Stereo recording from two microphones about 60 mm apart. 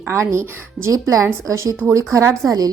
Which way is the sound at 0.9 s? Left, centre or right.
Right.